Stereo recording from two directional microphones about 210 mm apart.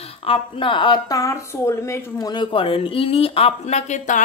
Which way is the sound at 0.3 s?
25° left (ahead or behind).